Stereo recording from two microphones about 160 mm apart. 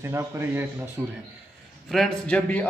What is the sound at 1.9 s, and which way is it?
Speech, 5° left (ahead or behind).